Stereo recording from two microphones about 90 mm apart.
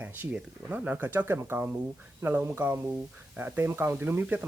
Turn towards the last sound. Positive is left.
turn(degrees=-20)  # may be behind; listen again after turning